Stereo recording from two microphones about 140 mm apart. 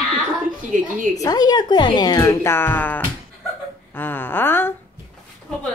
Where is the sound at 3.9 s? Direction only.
15° left (ahead or behind).